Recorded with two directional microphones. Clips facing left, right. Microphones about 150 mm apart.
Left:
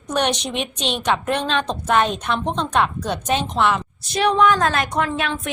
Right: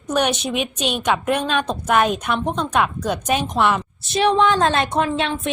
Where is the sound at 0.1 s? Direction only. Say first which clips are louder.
Right 1 dB; 5° right (ahead or behind).